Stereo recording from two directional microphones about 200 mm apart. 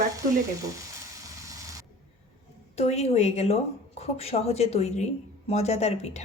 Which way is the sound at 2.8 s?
30° left (ahead or behind).